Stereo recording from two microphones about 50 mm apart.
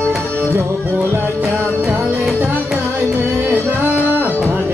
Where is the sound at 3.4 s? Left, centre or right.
Right.